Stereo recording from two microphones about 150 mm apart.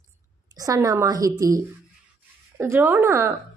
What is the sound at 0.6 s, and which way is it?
A woman's voice, 25° right (ahead or behind).